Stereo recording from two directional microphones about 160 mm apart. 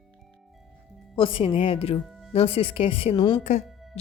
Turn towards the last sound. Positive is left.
turn(degrees=45)  # may be behind; listen again after turning